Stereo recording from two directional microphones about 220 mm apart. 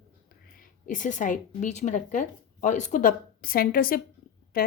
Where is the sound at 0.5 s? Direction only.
35° left (ahead or behind).